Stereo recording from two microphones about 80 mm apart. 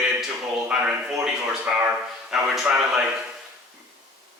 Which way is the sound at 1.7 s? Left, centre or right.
Centre.